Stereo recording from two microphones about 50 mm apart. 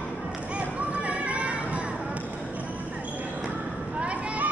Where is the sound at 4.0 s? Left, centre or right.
Right.